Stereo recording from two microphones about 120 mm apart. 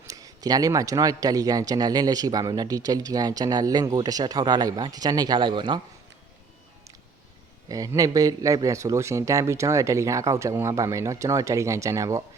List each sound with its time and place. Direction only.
0.1 s speech: 30° right (ahead or behind)
7.7 s speech: 30° right (ahead or behind)